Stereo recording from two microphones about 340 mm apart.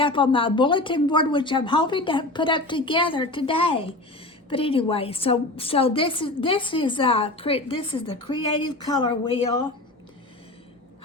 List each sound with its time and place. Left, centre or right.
0.0 s a woman's voice: centre